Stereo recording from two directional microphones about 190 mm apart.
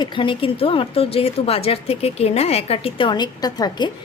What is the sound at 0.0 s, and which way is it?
A woman's voice, 25° left (ahead or behind).